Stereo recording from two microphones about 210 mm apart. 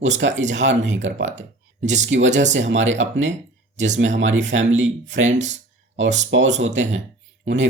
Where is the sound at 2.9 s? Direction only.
65° right (ahead or behind).